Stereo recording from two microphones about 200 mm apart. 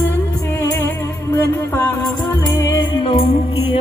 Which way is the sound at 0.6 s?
15° left (ahead or behind).